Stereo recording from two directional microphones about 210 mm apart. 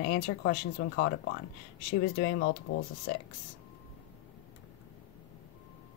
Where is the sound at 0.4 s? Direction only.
55° left (ahead or behind).